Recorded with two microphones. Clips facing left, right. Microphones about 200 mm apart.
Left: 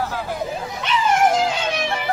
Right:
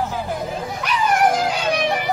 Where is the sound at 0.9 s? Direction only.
25° left (ahead or behind).